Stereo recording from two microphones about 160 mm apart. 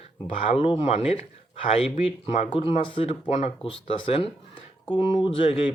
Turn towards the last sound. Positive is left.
turn(degrees=35)  # may be behind; listen again after turning